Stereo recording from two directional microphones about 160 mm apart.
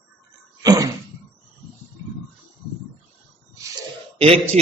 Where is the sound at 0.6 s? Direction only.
20° right (ahead or behind).